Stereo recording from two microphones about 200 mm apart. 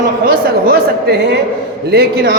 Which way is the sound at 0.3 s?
50° right (ahead or behind).